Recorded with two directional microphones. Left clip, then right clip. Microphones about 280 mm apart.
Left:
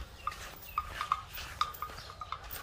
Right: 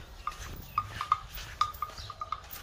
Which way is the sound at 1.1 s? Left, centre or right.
Centre.